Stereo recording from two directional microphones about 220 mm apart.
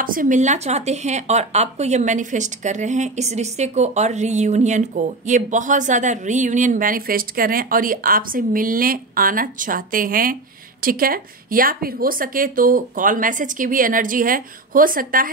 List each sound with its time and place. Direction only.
0.0 s speech: 40° right (ahead or behind)